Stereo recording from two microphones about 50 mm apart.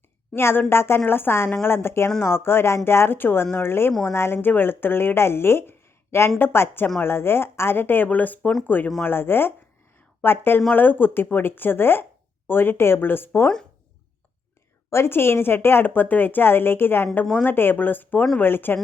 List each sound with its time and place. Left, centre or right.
0.3 s speech: left
4.4 s speech: left
14.8 s speech: left